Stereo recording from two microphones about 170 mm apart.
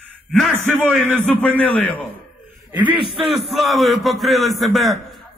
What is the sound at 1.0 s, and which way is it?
Speech, 10° left (ahead or behind).